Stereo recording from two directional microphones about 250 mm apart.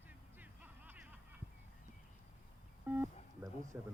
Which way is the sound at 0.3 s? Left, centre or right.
Centre.